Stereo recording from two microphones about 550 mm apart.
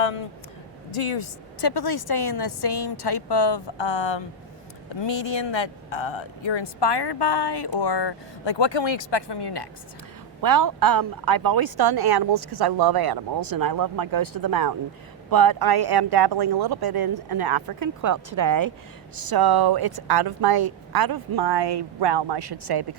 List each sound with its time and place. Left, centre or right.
0.0 s a man's voice: left
1.7 s speech: left
10.4 s speech: right